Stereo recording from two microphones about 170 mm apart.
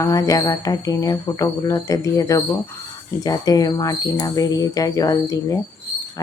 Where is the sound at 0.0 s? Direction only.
20° left (ahead or behind).